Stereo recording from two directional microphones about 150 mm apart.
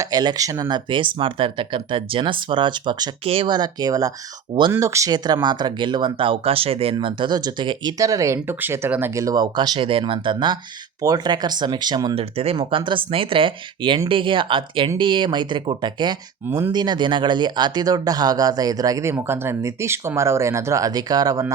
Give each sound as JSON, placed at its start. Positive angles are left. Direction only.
{"t": 0.0, "sound": "speech", "side_deg": -25}
{"t": 12.1, "sound": "speech", "side_deg": -40}
{"t": 16.5, "sound": "speech", "side_deg": -15}
{"t": 16.7, "sound": "speech", "side_deg": -30}